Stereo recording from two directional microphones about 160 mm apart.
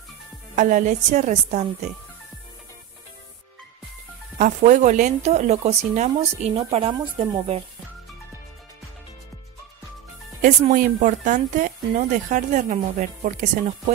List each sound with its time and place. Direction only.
0.6 s speech: 50° right (ahead or behind)
4.4 s speech: 50° right (ahead or behind)
10.4 s speech: 55° right (ahead or behind)